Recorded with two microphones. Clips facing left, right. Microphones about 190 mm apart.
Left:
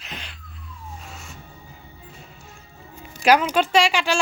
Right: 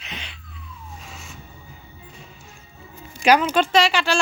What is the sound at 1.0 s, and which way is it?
Music, centre (ahead or behind).